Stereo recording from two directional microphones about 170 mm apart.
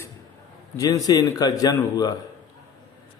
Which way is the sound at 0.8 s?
20° left (ahead or behind).